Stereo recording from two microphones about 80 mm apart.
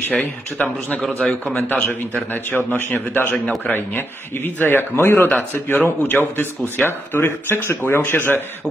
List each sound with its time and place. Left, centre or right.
0.2 s a man's voice: left